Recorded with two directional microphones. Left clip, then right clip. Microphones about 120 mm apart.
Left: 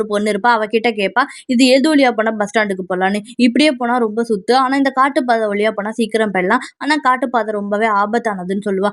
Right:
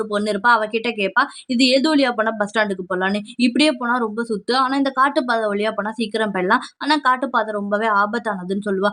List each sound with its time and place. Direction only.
0.1 s speech: 35° left (ahead or behind)